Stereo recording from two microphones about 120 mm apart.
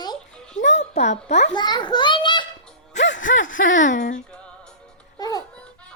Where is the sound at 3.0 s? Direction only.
90° left.